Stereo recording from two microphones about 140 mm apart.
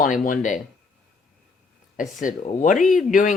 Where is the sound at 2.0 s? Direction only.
65° left (ahead or behind).